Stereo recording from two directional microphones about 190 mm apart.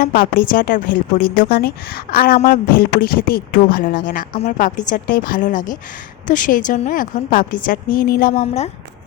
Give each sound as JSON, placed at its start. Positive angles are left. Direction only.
{"t": 0.0, "sound": "speech", "side_deg": 50}